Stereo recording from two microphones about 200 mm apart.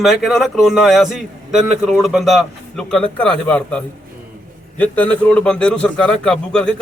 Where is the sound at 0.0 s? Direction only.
Centre (ahead or behind).